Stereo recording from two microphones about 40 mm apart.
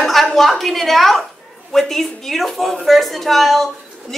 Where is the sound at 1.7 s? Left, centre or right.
Centre.